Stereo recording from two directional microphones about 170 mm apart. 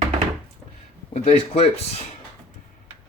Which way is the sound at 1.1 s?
35° left (ahead or behind).